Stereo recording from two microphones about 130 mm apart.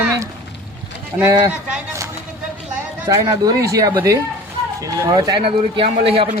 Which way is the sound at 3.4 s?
25° right (ahead or behind).